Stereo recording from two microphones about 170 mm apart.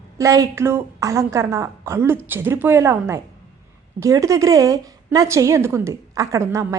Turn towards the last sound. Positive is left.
turn(degrees=-20)  # may be behind; listen again after turning